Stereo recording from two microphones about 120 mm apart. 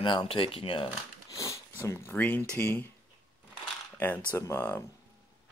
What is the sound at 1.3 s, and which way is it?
Speech, 25° left (ahead or behind).